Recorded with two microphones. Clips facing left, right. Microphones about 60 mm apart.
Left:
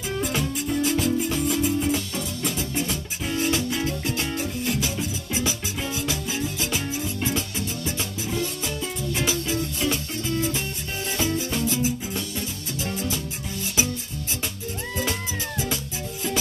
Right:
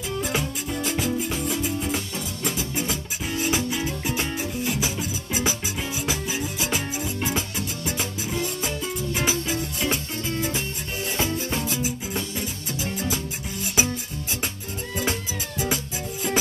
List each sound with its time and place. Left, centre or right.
0.7 s music: centre
5.4 s music: right
7.5 s music: right